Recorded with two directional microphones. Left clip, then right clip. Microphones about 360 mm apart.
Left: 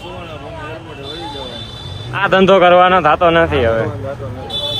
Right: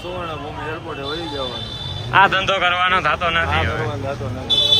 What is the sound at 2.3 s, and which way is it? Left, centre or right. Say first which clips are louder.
A man's voice: left 8 dB; centre.